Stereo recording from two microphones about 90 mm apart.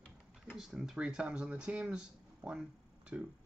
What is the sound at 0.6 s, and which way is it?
Speech, 5° right (ahead or behind).